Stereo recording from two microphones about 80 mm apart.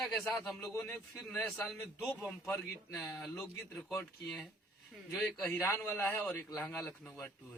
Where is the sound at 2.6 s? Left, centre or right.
Centre.